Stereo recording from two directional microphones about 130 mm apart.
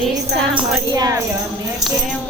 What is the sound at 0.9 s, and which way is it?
Speech, 30° right (ahead or behind).